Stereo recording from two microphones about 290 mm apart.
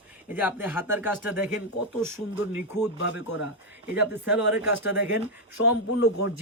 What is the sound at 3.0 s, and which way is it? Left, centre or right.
Speech, left.